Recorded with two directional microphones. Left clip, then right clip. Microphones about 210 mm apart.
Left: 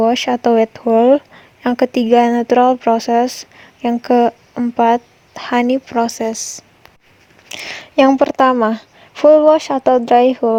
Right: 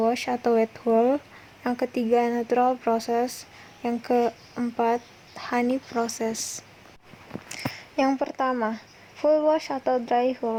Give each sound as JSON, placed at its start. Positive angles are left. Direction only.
{"t": 0.0, "sound": "speech", "side_deg": 40}